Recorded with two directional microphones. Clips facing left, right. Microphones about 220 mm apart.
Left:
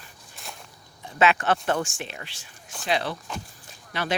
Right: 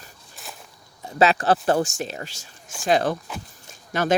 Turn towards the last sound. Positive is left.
turn(degrees=-45)  # may be behind; listen again after turning